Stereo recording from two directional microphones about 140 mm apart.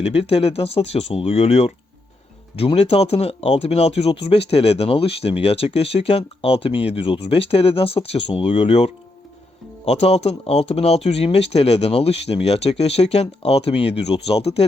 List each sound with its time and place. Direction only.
0.0 s speech: 45° left (ahead or behind)